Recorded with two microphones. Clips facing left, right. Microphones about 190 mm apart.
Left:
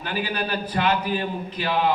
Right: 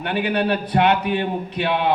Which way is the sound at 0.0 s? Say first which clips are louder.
Right 6 dB; 65° right (ahead or behind).